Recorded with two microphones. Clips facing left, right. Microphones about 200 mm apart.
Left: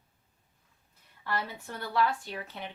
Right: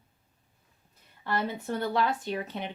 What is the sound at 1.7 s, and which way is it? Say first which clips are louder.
Speech: right 1 dB; 20° right (ahead or behind).